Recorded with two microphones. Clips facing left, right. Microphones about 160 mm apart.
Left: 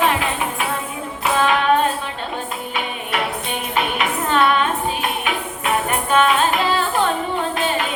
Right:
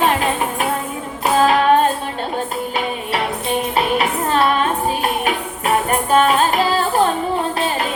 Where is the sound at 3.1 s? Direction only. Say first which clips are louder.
Right 3 dB; 35° right (ahead or behind).